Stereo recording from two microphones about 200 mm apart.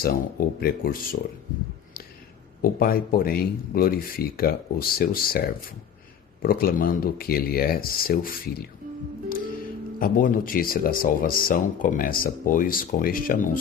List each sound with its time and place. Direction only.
0.0 s speech: 50° left (ahead or behind)
2.6 s speech: 45° left (ahead or behind)
10.0 s speech: 45° left (ahead or behind)